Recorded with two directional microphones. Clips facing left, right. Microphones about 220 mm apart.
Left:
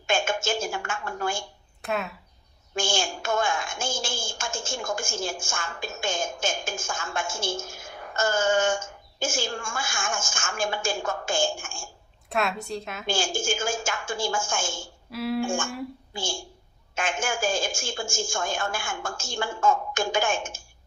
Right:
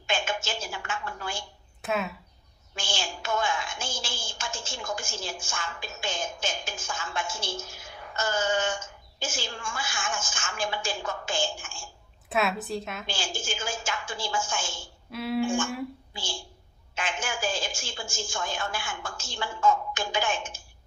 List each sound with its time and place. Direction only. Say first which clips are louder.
0.1 s a woman's voice: left 5 dB; 45° left (ahead or behind)
1.8 s a woman's voice: even; centre (ahead or behind)
2.7 s a woman's voice: left 7 dB; 45° left (ahead or behind)
12.3 s a woman's voice: even; 5° right (ahead or behind)
13.1 s a woman's voice: left 7 dB; 45° left (ahead or behind)
15.1 s a woman's voice: left 2 dB; centre (ahead or behind)
15.4 s a woman's voice: right 1 dB; 45° left (ahead or behind)